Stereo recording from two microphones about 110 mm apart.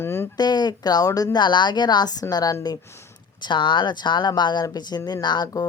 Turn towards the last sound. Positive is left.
turn(degrees=40)  # may be behind; listen again after turning